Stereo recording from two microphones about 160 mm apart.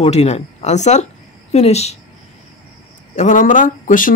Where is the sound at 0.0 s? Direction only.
45° left (ahead or behind).